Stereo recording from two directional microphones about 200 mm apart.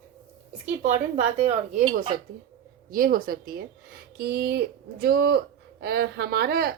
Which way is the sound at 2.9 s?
45° right (ahead or behind).